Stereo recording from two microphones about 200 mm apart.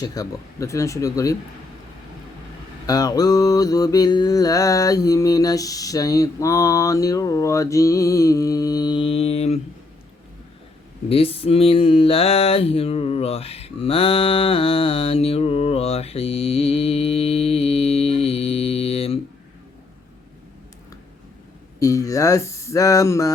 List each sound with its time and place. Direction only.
0.0 s mantra: 20° left (ahead or behind)
2.8 s mantra: 20° left (ahead or behind)
11.1 s a sound: 30° left (ahead or behind)
21.8 s speech: 15° left (ahead or behind)